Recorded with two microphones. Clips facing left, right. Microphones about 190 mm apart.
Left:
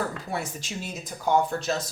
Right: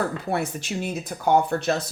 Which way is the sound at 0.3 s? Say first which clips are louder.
Right 6 dB; 60° right (ahead or behind).